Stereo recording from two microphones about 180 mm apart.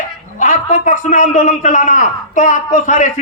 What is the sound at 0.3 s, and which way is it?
Speech, 45° left (ahead or behind).